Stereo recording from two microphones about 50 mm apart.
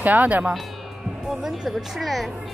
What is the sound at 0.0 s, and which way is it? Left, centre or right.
Speech, right.